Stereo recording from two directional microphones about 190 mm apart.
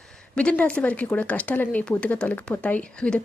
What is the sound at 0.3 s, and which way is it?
Speech, 5° left (ahead or behind).